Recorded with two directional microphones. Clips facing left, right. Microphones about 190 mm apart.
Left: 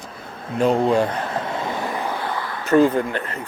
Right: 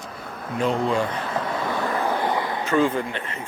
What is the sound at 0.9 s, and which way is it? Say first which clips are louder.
Speech: left 5 dB; 55° left (ahead or behind).